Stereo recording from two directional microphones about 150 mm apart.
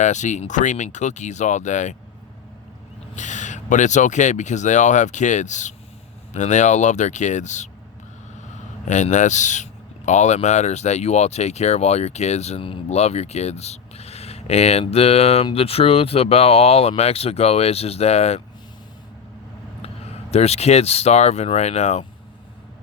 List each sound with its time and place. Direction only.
0.0 s speech: 50° left (ahead or behind)
3.2 s speech: 55° left (ahead or behind)
8.9 s speech: 55° left (ahead or behind)
20.3 s speech: 45° left (ahead or behind)